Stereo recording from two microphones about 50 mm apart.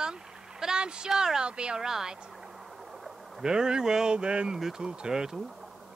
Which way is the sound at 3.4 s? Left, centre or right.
Centre.